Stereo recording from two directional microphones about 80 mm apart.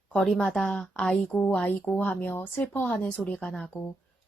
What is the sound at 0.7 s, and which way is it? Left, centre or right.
Speech, centre.